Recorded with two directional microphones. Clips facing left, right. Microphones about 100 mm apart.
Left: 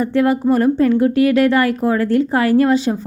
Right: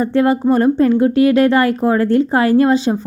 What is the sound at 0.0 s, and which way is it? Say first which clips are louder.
A woman's voice: right 1 dB; 30° right (ahead or behind).